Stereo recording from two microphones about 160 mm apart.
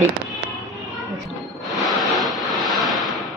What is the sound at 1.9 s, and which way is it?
Vehicle, centre (ahead or behind).